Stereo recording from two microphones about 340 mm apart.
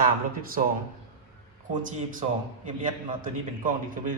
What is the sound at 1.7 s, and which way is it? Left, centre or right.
A man's voice, right.